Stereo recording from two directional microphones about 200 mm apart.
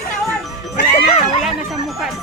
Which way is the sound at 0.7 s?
35° left (ahead or behind).